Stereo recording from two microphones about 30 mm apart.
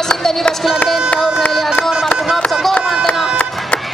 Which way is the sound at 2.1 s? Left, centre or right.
Left.